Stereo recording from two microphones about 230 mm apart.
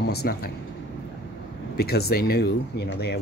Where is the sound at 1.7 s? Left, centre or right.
Left.